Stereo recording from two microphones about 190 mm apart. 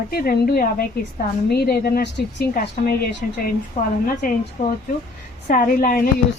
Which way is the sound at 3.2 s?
50° left (ahead or behind).